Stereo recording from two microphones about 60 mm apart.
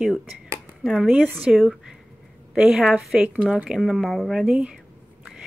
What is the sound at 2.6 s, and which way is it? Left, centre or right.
Speech, centre.